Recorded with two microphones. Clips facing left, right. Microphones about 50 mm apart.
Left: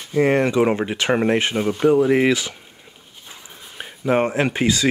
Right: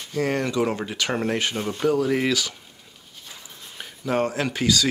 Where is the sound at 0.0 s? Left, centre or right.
Left.